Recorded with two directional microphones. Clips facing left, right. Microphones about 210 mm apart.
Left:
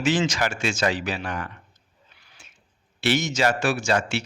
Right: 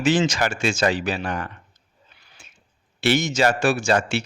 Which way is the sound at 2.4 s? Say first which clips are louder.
Right 2 dB; 30° right (ahead or behind).